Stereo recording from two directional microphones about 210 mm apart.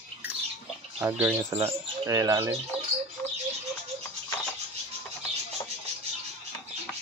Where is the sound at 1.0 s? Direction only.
10° right (ahead or behind).